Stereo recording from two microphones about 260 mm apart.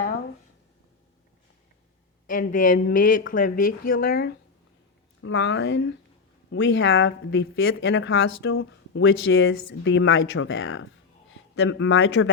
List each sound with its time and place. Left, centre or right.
2.2 s speech: left